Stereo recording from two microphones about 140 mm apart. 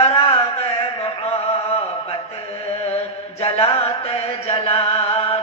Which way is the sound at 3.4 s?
45° left (ahead or behind).